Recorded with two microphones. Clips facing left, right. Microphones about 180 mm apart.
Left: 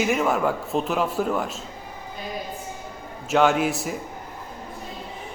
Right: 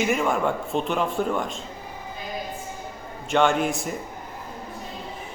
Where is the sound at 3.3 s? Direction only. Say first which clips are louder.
Left 1 dB; 5° left (ahead or behind).